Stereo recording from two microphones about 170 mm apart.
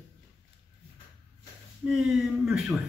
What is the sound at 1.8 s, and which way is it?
Speech, 5° right (ahead or behind).